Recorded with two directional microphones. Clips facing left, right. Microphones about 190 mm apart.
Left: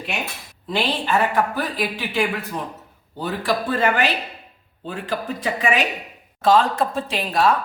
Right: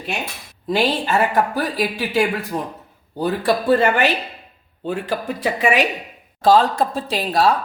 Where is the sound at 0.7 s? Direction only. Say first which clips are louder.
Right 3 dB; 40° right (ahead or behind).